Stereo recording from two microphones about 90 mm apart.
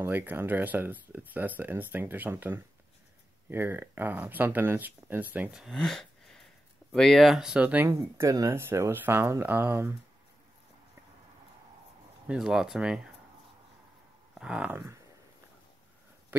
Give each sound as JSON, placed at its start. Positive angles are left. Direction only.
{"t": 0.0, "sound": "speech", "side_deg": -20}
{"t": 5.7, "sound": "a sound", "side_deg": 5}
{"t": 6.9, "sound": "speech", "side_deg": 0}
{"t": 7.9, "sound": "speech", "side_deg": -35}
{"t": 12.3, "sound": "speech", "side_deg": -5}
{"t": 14.4, "sound": "speech", "side_deg": -15}